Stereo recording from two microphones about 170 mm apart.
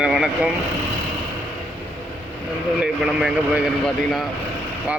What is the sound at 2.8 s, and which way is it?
A man's voice, 5° right (ahead or behind).